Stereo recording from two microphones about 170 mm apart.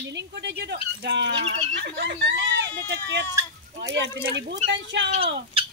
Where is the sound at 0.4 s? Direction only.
85° right.